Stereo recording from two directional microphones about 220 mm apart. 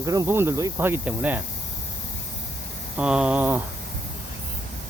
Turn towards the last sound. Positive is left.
turn(degrees=-10)  # may be behind; listen again after turning